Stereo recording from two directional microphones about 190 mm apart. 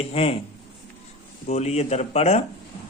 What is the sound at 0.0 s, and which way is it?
Speech, 30° left (ahead or behind).